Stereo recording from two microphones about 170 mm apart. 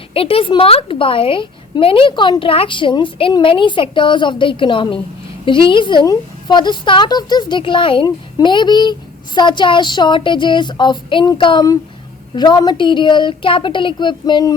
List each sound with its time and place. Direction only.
0.1 s a woman's voice: 35° left (ahead or behind)